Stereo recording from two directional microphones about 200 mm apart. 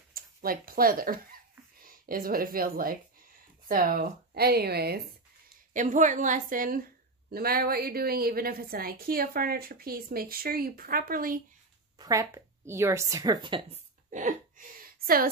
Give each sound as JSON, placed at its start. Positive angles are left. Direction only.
{"t": 0.1, "sound": "a woman's voice", "side_deg": -45}
{"t": 5.7, "sound": "a woman's voice", "side_deg": -40}
{"t": 12.0, "sound": "speech", "side_deg": -15}
{"t": 14.1, "sound": "gasp", "side_deg": -40}